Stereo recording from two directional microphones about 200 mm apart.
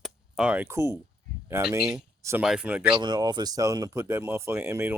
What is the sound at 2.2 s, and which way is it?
Speech, 15° right (ahead or behind).